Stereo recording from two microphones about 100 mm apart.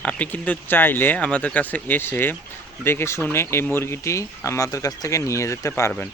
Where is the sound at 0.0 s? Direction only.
15° left (ahead or behind).